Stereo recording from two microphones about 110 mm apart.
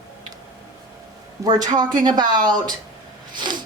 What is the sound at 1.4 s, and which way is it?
A woman's voice, 35° right (ahead or behind).